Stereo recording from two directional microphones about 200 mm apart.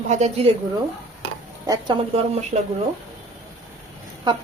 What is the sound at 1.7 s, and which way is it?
Speech, 25° right (ahead or behind).